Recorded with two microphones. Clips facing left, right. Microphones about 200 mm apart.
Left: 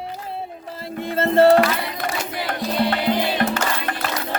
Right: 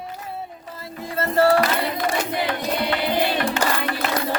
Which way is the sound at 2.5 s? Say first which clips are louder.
Left 2 dB; 50° left (ahead or behind).